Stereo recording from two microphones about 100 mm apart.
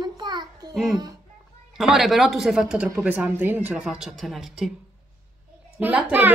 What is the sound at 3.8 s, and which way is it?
Speech, 5° right (ahead or behind).